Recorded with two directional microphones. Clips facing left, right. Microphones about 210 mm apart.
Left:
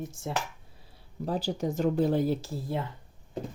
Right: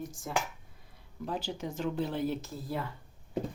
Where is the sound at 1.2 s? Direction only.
35° left (ahead or behind).